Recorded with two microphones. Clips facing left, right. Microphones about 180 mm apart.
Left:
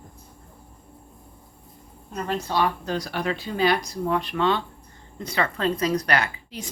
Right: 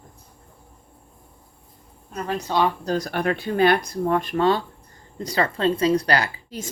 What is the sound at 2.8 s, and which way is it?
A woman's voice, 45° right (ahead or behind).